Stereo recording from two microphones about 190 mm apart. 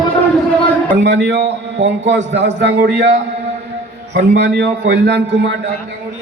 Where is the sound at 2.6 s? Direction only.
65° right (ahead or behind).